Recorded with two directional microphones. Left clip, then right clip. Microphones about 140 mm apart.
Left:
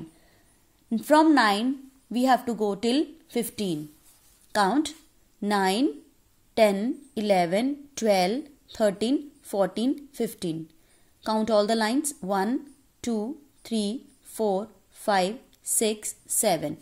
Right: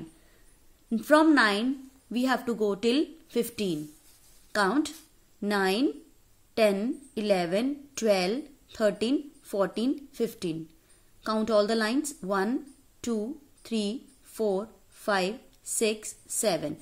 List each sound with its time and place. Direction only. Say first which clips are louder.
0.8 s a woman's voice: left 2 dB; 25° left (ahead or behind)